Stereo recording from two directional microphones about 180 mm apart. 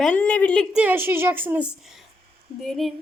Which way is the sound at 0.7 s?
10° right (ahead or behind).